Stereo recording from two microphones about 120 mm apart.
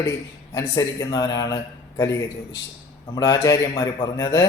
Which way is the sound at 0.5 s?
30° left (ahead or behind).